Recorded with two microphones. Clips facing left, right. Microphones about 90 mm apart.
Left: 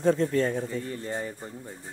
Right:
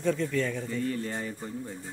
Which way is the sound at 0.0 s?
35° left (ahead or behind).